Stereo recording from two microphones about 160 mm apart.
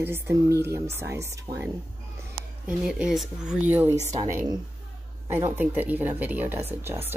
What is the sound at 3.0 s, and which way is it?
A woman's voice, centre (ahead or behind).